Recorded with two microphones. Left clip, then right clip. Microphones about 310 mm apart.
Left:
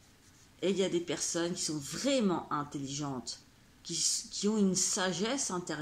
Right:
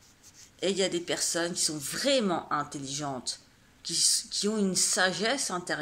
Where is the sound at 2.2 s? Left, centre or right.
Right.